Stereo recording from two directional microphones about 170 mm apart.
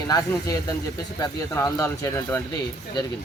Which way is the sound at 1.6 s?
20° left (ahead or behind).